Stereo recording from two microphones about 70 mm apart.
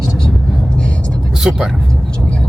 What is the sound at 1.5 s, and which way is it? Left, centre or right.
Speech, centre.